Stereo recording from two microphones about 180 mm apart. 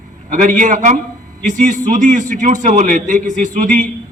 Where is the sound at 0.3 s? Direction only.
45° right (ahead or behind).